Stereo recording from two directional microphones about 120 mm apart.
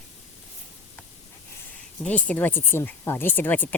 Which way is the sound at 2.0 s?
10° left (ahead or behind).